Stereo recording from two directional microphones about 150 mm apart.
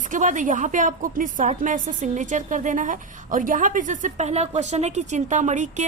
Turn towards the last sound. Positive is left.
turn(degrees=-55)  # may be behind; listen again after turning